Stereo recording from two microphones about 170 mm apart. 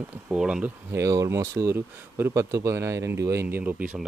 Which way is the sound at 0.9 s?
20° right (ahead or behind).